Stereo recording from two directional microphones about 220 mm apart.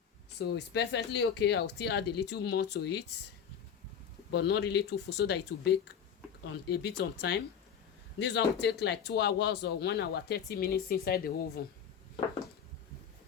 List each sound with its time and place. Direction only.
0.3 s speech: 50° left (ahead or behind)
4.3 s speech: 50° left (ahead or behind)